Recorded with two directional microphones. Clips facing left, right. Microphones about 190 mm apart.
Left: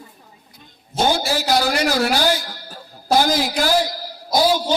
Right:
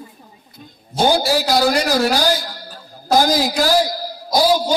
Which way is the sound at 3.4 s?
40° right (ahead or behind).